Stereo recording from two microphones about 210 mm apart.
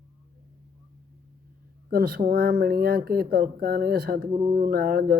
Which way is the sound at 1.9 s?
45° right (ahead or behind).